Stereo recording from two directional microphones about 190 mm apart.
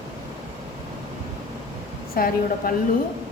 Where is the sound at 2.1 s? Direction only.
50° left (ahead or behind).